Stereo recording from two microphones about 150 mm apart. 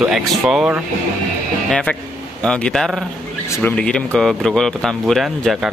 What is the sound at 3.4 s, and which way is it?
Speech, 20° left (ahead or behind).